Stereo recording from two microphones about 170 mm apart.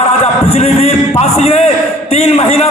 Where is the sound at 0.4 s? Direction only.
35° left (ahead or behind).